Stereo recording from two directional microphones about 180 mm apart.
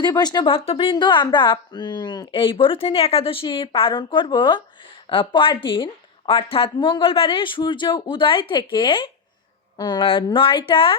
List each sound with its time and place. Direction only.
0.0 s speech: 25° left (ahead or behind)